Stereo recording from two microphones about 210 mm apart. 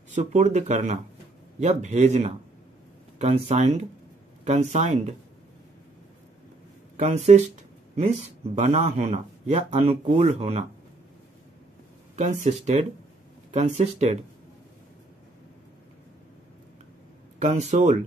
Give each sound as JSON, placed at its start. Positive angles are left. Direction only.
{"t": 0.1, "sound": "speech", "side_deg": -35}
{"t": 7.0, "sound": "speech", "side_deg": -30}
{"t": 12.2, "sound": "speech", "side_deg": -35}
{"t": 17.4, "sound": "speech", "side_deg": -35}